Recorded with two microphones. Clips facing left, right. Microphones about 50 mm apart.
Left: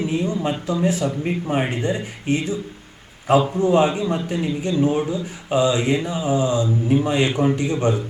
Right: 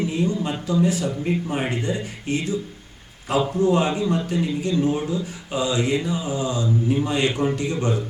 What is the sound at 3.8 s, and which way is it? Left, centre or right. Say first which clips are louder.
A man's voice: left 2 dB; centre.